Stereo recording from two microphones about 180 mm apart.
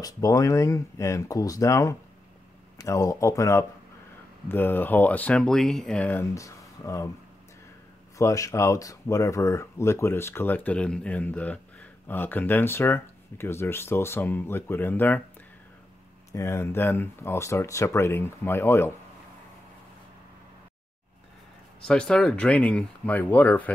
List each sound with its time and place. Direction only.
0.0 s speech: 20° left (ahead or behind)
8.2 s speech: 15° left (ahead or behind)
16.3 s speech: 15° left (ahead or behind)
21.8 s speech: 5° left (ahead or behind)